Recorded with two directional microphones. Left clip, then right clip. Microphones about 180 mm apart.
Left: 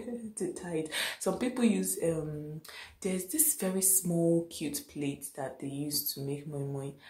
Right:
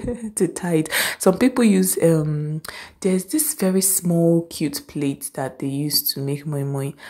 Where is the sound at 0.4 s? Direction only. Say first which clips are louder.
Right 14 dB; 45° right (ahead or behind).